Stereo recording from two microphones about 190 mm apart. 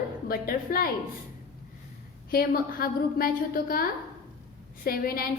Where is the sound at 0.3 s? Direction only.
50° left (ahead or behind).